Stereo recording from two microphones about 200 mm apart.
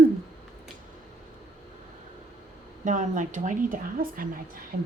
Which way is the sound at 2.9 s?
40° right (ahead or behind).